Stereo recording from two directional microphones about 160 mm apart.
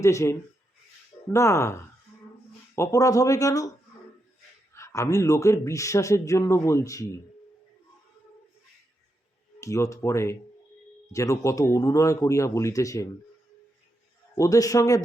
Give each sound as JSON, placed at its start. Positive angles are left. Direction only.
{"t": 0.0, "sound": "a man's voice", "side_deg": 20}
{"t": 4.7, "sound": "a man's voice", "side_deg": 15}
{"t": 9.6, "sound": "a man's voice", "side_deg": 20}
{"t": 14.3, "sound": "a man's voice", "side_deg": 20}